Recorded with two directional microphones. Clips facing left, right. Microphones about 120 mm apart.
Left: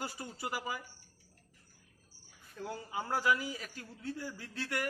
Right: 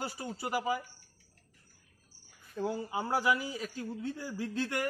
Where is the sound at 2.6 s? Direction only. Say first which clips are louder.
Right 6 dB; 20° right (ahead or behind).